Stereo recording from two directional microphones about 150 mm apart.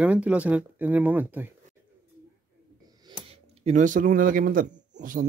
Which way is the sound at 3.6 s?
55° right (ahead or behind).